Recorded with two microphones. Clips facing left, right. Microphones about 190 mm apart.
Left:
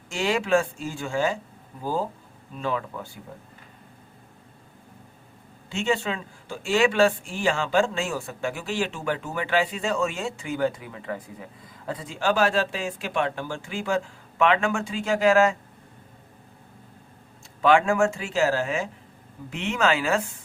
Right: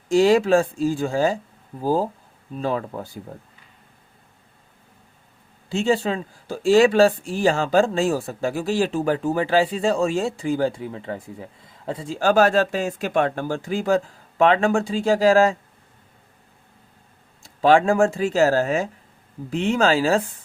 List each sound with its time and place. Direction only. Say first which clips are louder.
0.1 s speech: right 7 dB; 35° right (ahead or behind)
5.6 s speech: right 5 dB; 35° right (ahead or behind)
17.4 s speech: right 3 dB; 35° right (ahead or behind)